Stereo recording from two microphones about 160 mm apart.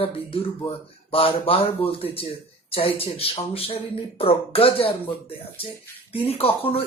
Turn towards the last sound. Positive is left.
turn(degrees=35)  # may be behind; listen again after turning